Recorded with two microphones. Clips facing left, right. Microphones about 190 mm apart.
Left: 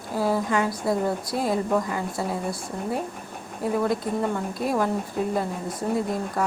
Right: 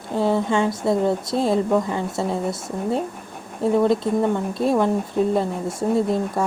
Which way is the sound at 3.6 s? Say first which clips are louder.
Right 6 dB; 25° right (ahead or behind).